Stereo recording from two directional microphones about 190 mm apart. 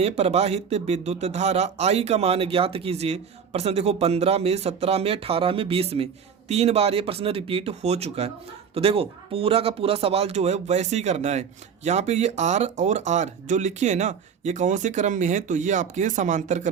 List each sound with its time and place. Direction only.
0.0 s speech: 30° right (ahead or behind)